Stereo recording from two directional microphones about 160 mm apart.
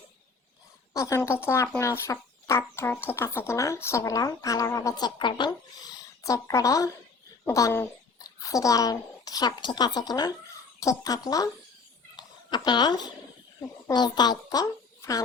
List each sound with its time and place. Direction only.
0.9 s speech: 20° left (ahead or behind)
12.1 s a sound: 25° left (ahead or behind)
13.6 s a child's voice: 25° left (ahead or behind)